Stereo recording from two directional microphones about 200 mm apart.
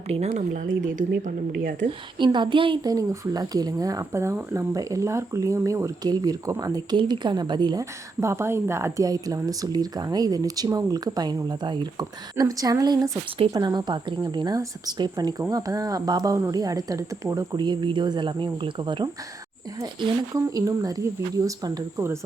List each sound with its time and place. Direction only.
0.1 s speech: 35° right (ahead or behind)
1.1 s speech: 45° right (ahead or behind)
2.1 s speech: 25° right (ahead or behind)